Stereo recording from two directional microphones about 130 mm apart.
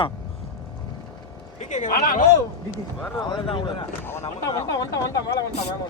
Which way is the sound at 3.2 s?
35° left (ahead or behind).